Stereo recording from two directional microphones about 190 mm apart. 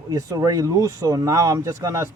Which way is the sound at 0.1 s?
20° right (ahead or behind).